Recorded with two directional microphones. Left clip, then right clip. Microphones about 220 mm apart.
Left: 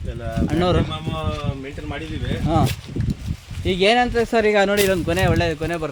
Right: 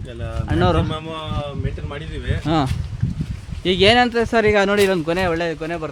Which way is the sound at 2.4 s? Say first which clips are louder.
Right 1 dB; 35° right (ahead or behind).